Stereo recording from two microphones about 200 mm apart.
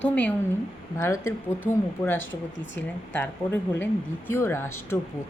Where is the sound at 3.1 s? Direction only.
10° left (ahead or behind).